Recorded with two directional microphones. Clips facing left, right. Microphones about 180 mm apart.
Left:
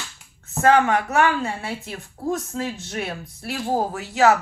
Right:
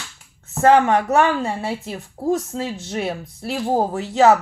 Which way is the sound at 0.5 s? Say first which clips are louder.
Right 3 dB; 30° right (ahead or behind).